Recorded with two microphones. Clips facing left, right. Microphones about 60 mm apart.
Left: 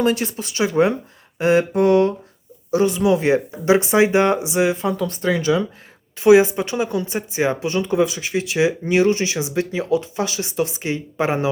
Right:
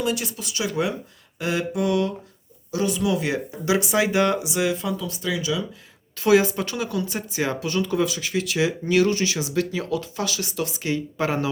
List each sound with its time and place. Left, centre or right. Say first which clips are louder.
0.0 s mantra: left 6 dB; left
2.7 s speech: left 6 dB; left
4.9 s speech: left 7 dB; left
6.1 s speech: left 6 dB; left